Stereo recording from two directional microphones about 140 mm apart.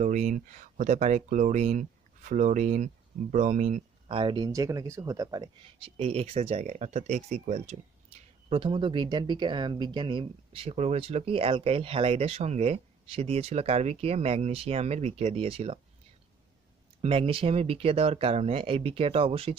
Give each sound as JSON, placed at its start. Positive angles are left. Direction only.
{"t": 0.0, "sound": "speech", "side_deg": -60}
{"t": 4.1, "sound": "speech", "side_deg": -35}
{"t": 5.9, "sound": "speech", "side_deg": -45}
{"t": 17.0, "sound": "speech", "side_deg": -40}